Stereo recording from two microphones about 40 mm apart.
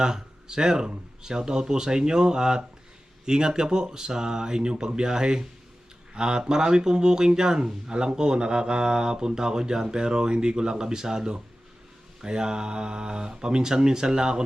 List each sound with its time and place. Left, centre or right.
0.0 s speech: centre